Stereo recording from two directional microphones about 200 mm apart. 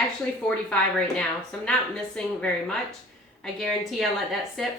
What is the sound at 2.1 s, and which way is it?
Speech, 5° left (ahead or behind).